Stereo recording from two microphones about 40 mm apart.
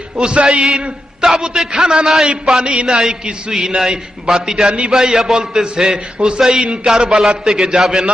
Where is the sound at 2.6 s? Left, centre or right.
Right.